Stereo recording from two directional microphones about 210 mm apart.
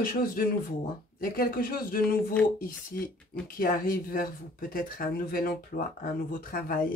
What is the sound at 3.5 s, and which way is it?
Speech, 40° left (ahead or behind).